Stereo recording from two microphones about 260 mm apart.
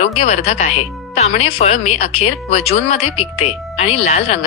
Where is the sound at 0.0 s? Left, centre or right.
Left.